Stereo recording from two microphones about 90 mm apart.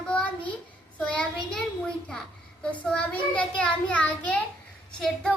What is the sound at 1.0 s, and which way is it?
A child's voice, 15° left (ahead or behind).